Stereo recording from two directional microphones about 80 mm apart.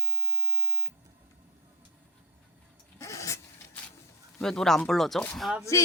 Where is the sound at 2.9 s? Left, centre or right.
Left.